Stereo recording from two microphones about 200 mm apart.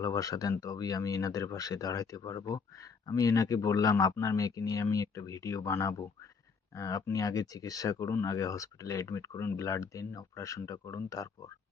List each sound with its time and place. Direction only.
0.0 s speech: 15° left (ahead or behind)